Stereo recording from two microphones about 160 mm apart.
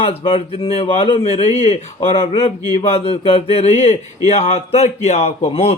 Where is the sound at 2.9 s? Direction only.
40° left (ahead or behind).